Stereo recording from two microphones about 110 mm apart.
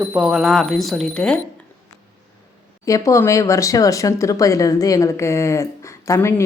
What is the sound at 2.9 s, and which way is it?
Speech, 30° left (ahead or behind).